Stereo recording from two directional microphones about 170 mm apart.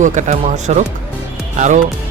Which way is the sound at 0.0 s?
45° right (ahead or behind).